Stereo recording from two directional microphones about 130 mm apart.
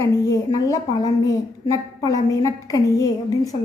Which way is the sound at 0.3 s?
25° left (ahead or behind).